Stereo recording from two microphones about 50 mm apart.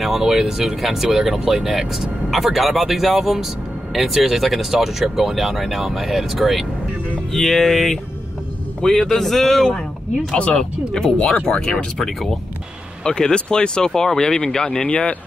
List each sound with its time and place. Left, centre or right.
0.2 s speech: centre
10.3 s speech: centre
10.9 s speech: centre; by 15.1 s left